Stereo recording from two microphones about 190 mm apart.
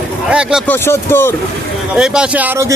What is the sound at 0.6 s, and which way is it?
Speech, 10° left (ahead or behind).